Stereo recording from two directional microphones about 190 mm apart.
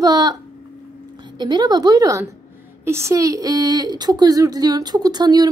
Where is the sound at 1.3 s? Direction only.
20° right (ahead or behind).